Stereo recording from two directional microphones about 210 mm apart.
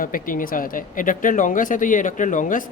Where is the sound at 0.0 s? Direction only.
40° left (ahead or behind).